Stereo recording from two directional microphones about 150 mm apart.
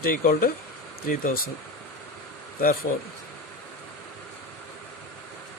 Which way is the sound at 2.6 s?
70° left (ahead or behind).